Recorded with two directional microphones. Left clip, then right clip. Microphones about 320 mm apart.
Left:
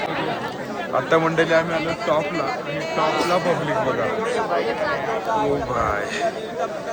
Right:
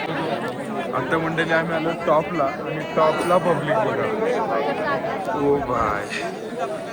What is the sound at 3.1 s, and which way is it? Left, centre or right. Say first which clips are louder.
Speech: right 1 dB; left.